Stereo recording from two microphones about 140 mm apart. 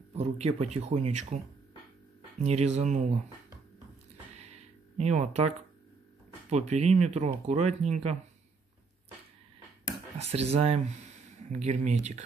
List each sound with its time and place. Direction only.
0.1 s speech: 50° right (ahead or behind)
4.4 s a sound: 50° right (ahead or behind)
6.5 s speech: 50° right (ahead or behind)
10.1 s speech: 50° right (ahead or behind)